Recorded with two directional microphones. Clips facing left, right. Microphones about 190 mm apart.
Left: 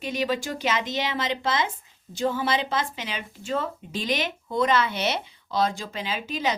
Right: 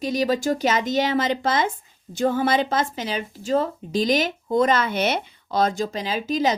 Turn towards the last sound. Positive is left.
turn(degrees=-40)  # may be behind; listen again after turning